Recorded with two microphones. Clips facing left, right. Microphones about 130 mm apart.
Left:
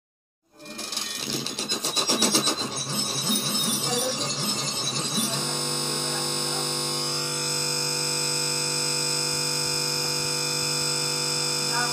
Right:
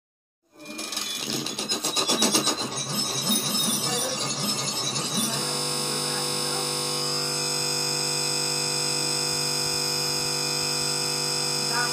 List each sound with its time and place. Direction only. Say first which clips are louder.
2.0 s wood: even; 15° right (ahead or behind)